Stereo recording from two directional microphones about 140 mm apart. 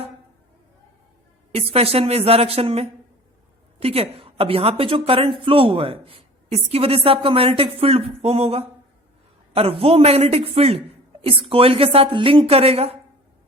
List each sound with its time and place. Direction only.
1.5 s a woman's voice: 45° right (ahead or behind)